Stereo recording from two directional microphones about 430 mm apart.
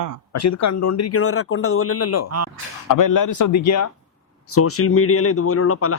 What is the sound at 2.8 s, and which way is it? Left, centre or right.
Speech, left.